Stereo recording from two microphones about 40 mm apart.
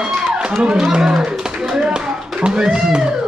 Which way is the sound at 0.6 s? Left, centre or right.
Right.